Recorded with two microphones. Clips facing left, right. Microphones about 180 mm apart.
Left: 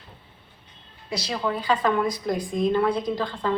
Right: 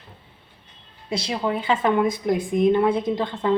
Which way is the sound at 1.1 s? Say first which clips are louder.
Right 3 dB; 25° right (ahead or behind).